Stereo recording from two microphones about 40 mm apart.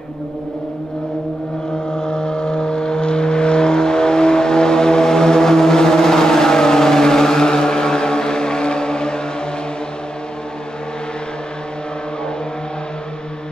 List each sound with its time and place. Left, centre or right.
2.0 s vehicle: left